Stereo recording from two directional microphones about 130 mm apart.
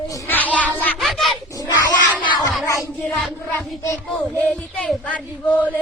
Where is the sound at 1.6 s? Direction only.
25° left (ahead or behind).